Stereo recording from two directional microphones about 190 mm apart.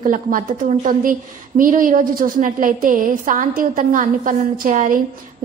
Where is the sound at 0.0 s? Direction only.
45° right (ahead or behind).